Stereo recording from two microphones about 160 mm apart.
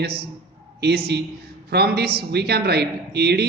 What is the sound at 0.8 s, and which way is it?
A man's voice, 85° right.